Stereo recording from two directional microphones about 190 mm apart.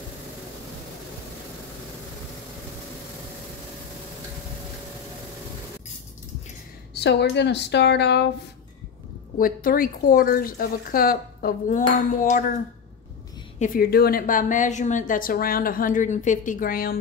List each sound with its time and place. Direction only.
6.9 s speech: 60° left (ahead or behind)
9.4 s a woman's voice: 50° left (ahead or behind)
13.6 s a woman's voice: 55° left (ahead or behind)